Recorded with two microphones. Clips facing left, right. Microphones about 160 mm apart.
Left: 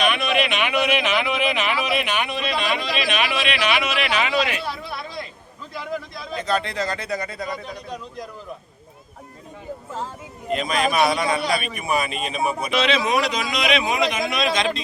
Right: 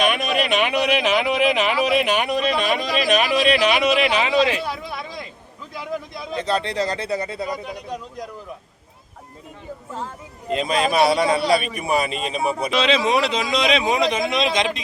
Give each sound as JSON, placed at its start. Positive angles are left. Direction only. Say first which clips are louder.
{"t": 0.0, "sound": "speech", "louder": "right 1 dB", "side_deg": -40}
{"t": 4.7, "sound": "a sound", "louder": "right 1 dB", "side_deg": -15}
{"t": 6.3, "sound": "a man's voice", "louder": "right 2 dB", "side_deg": -30}
{"t": 7.3, "sound": "speech", "louder": "right 3 dB", "side_deg": -10}
{"t": 10.5, "sound": "a man's voice", "louder": "right 2 dB", "side_deg": -25}